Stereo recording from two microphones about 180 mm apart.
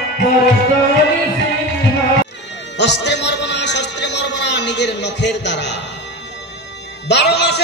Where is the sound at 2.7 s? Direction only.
75° left (ahead or behind).